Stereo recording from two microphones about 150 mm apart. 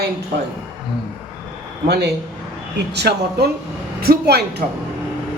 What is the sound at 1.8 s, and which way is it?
A woman's voice, 90° right.